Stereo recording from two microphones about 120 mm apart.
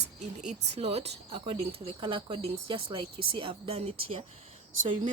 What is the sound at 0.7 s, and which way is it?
Speech, 60° right (ahead or behind).